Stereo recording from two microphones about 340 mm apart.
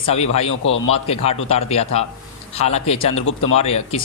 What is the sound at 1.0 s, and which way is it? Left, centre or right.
A man's voice, centre.